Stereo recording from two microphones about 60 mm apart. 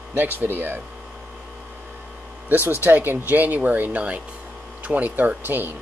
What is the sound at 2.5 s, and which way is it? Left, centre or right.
Speech, right.